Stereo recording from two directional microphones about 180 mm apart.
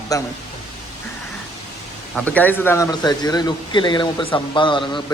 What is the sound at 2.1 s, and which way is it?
A man's voice, 10° left (ahead or behind).